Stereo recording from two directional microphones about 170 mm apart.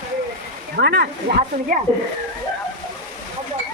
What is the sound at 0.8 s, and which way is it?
Speech, 75° right (ahead or behind).